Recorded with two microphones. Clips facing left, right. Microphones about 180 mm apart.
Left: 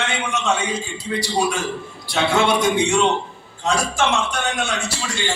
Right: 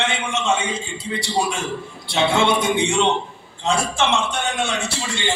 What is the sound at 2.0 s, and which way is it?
A man's voice, 25° right (ahead or behind).